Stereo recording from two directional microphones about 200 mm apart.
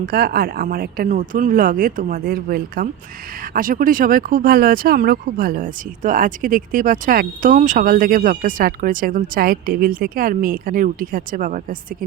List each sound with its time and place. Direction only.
0.0 s speech: 50° right (ahead or behind)